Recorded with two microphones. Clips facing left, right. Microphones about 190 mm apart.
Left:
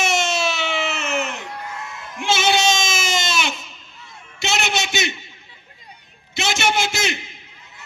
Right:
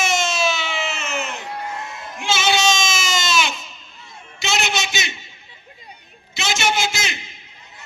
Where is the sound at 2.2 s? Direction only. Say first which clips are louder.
Left 1 dB; 55° left (ahead or behind).